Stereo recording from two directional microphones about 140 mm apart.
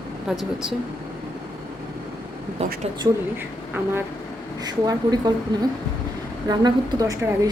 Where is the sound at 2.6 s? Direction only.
50° right (ahead or behind).